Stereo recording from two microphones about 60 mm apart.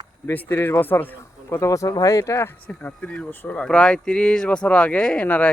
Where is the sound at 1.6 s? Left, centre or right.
Left.